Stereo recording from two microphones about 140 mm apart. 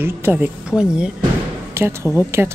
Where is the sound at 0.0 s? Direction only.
15° right (ahead or behind).